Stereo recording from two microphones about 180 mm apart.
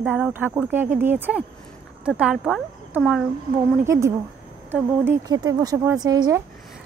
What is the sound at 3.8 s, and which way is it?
A woman's voice, 15° right (ahead or behind).